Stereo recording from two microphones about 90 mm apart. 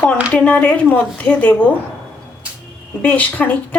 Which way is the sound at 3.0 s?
20° left (ahead or behind).